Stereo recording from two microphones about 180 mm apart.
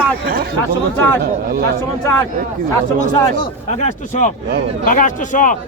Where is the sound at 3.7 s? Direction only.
40° left (ahead or behind).